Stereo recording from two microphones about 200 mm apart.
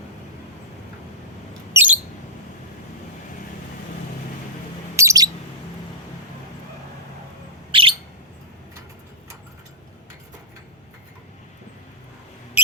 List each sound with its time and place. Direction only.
1.7 s mouse: 10° right (ahead or behind)
4.9 s bird: 15° right (ahead or behind)
7.7 s bird: 25° right (ahead or behind)